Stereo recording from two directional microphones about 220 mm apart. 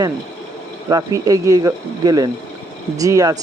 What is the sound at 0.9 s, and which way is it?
Speech, 15° right (ahead or behind).